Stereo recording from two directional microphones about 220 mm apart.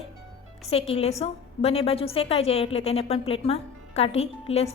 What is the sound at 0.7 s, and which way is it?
A woman's voice, 25° left (ahead or behind).